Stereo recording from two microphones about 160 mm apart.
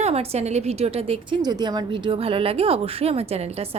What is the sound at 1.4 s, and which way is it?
Speech, 25° right (ahead or behind).